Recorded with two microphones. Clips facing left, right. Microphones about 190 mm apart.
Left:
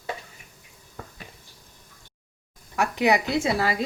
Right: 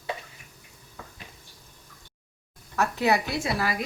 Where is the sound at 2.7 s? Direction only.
15° left (ahead or behind).